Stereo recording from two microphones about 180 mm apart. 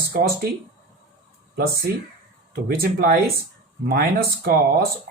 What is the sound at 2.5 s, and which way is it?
Speech, 55° right (ahead or behind).